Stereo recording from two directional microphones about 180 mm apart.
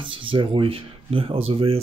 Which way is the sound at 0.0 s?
30° right (ahead or behind).